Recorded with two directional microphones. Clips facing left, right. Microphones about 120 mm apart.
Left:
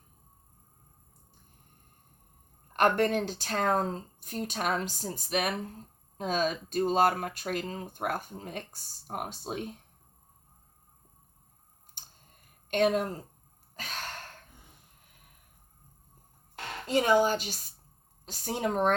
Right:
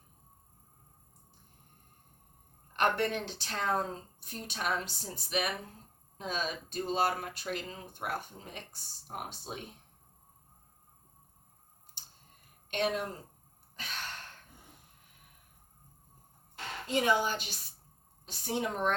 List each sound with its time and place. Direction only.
2.7 s speech: 45° left (ahead or behind)
12.0 s tick: 50° left (ahead or behind)
12.7 s speech: 45° left (ahead or behind)
13.7 s gasp: 45° left (ahead or behind)
16.9 s speech: 40° left (ahead or behind)